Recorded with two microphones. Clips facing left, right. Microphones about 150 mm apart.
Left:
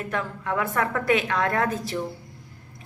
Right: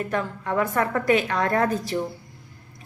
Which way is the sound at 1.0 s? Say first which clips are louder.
Even; centre (ahead or behind).